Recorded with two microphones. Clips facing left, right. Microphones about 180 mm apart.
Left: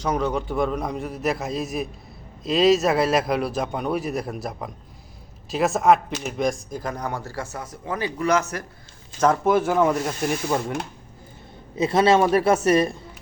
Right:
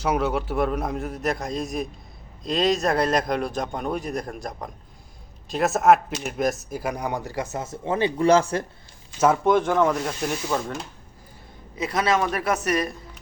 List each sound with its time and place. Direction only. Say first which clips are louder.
0.0 s a man's voice: even; 5° right (ahead or behind); by 8.6 s 30° right (ahead or behind)
9.2 s a man's voice: even; centre (ahead or behind)
11.8 s speech: left 5 dB; 30° left (ahead or behind)